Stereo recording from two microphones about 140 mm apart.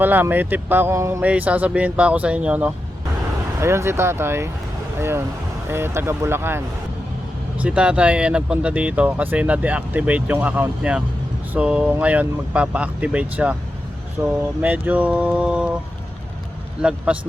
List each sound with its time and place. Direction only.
0.0 s speech: 15° right (ahead or behind)
3.6 s speech: 20° right (ahead or behind)
7.6 s speech: 10° right (ahead or behind)
14.2 s speech: 20° right (ahead or behind)
17.1 s speech: 10° right (ahead or behind)